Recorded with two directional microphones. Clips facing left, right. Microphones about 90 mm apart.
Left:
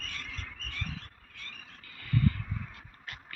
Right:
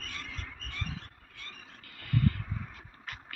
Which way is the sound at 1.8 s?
75° right (ahead or behind).